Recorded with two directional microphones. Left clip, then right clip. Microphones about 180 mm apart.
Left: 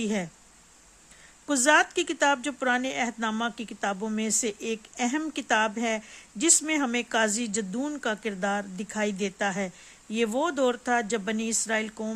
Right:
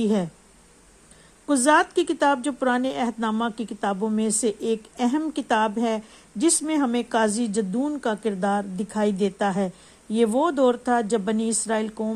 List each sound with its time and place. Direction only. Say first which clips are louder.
0.0 s speech: right 6 dB; 10° left (ahead or behind)
1.5 s speech: right 3 dB; 20° left (ahead or behind)